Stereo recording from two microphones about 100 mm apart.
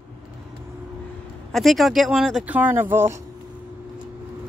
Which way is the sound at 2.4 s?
15° right (ahead or behind).